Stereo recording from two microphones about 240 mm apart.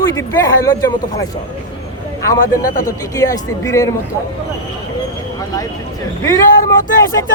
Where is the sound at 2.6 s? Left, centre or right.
Left.